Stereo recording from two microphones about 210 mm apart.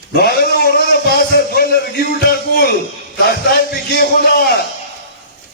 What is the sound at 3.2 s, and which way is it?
Speech, 45° left (ahead or behind).